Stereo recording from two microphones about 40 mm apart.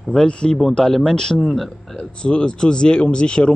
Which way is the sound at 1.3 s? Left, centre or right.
Centre.